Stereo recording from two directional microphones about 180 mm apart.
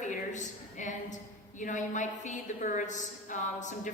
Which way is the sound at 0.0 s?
45° left (ahead or behind).